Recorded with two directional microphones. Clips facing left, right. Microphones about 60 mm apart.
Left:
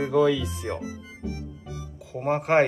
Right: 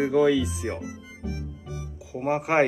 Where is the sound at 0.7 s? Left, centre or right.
Right.